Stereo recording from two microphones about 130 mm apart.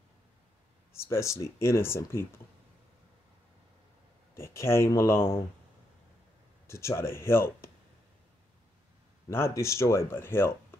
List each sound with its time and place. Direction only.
0.9 s speech: 20° left (ahead or behind)
4.4 s speech: 20° left (ahead or behind)
6.7 s speech: 20° left (ahead or behind)
9.3 s speech: 20° left (ahead or behind)